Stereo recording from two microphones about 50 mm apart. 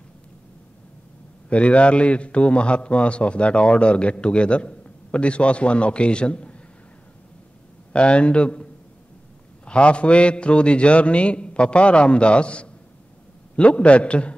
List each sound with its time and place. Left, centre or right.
1.5 s a man's voice: left
7.9 s a man's voice: left
9.7 s a man's voice: left